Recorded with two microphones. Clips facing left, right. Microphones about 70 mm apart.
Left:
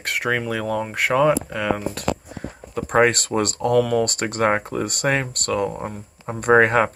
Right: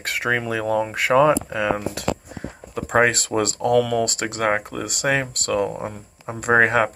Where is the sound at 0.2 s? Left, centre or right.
Right.